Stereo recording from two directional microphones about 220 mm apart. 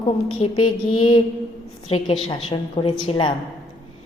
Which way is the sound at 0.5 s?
85° left.